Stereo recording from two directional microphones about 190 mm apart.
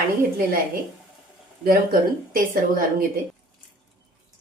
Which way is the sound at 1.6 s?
50° right (ahead or behind).